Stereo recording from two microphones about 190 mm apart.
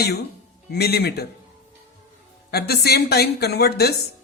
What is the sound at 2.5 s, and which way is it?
Speech, 55° left (ahead or behind).